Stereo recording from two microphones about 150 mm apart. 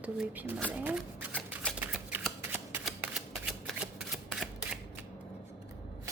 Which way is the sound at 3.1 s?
Centre (ahead or behind).